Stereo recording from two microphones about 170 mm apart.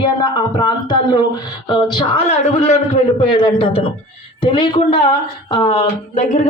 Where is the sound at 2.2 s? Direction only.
40° left (ahead or behind).